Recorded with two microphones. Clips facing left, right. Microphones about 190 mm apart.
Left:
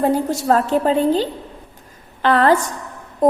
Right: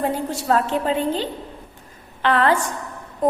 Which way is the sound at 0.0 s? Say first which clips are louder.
Left 6 dB; 40° left (ahead or behind).